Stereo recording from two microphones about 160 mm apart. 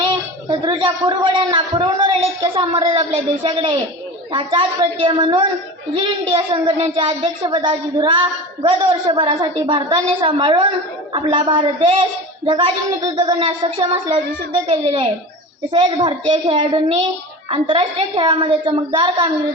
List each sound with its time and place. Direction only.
0.0 s a child's voice: 30° right (ahead or behind)